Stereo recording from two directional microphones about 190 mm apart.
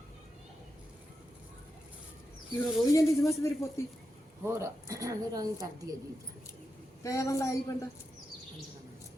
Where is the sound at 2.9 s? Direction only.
15° left (ahead or behind).